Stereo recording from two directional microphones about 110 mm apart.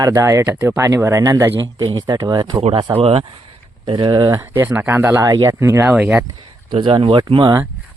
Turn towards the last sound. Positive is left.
turn(degrees=-50)  # may be behind; listen again after turning